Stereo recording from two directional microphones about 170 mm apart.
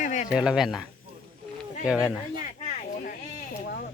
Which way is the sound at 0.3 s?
5° right (ahead or behind).